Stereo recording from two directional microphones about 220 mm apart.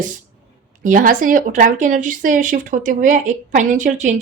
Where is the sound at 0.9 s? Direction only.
35° right (ahead or behind).